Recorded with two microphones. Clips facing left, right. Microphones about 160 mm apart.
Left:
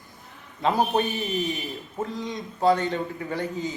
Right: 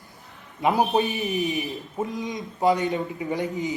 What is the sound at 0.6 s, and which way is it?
A man's voice, 15° right (ahead or behind).